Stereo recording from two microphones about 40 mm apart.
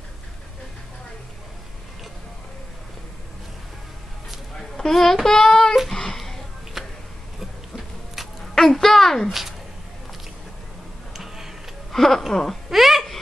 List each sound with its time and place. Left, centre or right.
4.6 s a child's voice: centre
5.9 s a sound: centre
6.8 s tick-tock: centre
7.3 s a sound: centre
8.5 s a woman's voice: centre
11.1 s tick-tock: centre
11.9 s speech: centre
12.6 s a child's voice: centre